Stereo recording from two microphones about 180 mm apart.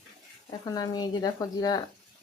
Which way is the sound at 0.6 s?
20° left (ahead or behind).